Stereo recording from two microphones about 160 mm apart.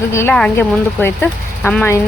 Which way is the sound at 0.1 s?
15° left (ahead or behind).